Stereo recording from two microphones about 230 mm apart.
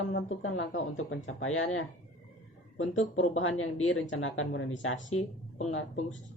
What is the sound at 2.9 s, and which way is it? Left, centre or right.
Speech, left.